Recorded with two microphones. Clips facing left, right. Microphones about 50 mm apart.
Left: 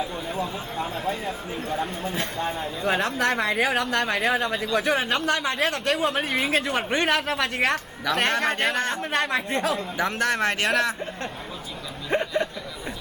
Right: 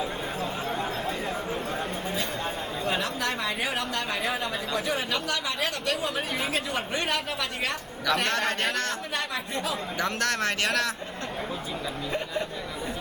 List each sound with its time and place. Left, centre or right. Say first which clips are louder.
2.8 s speech: left 6 dB; left
8.7 s speech: left 4 dB; left
9.1 s speech: left 6 dB; left
10.0 s speech: left 3 dB; centre
12.1 s speech: left 8 dB; left